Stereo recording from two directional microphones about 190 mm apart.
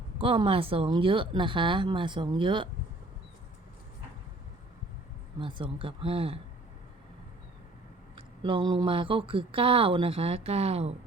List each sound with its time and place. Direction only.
0.2 s speech: 30° right (ahead or behind)
5.4 s speech: 25° right (ahead or behind)
8.4 s speech: 25° right (ahead or behind)